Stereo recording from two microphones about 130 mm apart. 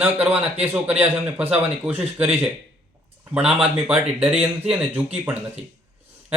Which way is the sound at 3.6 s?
10° right (ahead or behind).